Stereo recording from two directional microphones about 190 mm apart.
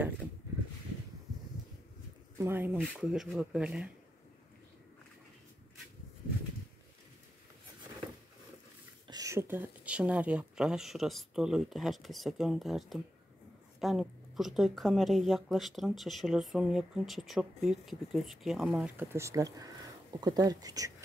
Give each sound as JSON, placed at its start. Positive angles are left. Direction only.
{"t": 2.3, "sound": "a woman's voice", "side_deg": -10}
{"t": 9.0, "sound": "a woman's voice", "side_deg": -20}